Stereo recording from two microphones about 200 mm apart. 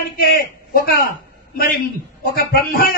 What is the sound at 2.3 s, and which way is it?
Speech, 50° left (ahead or behind).